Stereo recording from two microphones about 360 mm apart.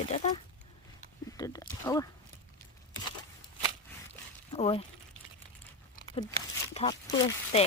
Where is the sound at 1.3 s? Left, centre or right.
Centre.